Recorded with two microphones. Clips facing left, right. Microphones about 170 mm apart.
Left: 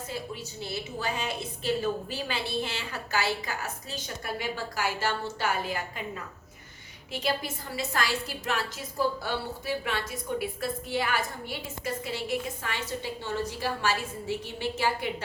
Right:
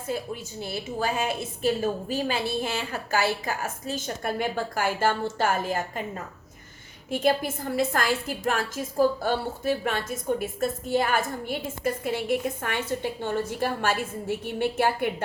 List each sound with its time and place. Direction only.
0.6 s a woman's voice: 50° right (ahead or behind)